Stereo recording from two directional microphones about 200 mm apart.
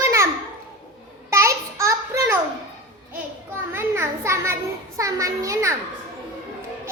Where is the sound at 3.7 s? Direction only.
10° right (ahead or behind).